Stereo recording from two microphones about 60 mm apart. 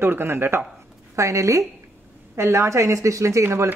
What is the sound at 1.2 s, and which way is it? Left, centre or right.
Speech, right.